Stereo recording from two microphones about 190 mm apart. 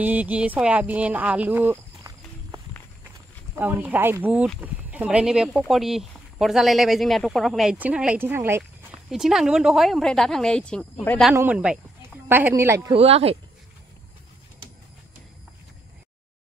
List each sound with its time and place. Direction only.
0.0 s speech: 10° right (ahead or behind)
9.1 s speech: centre (ahead or behind)
12.9 s speech: 30° right (ahead or behind)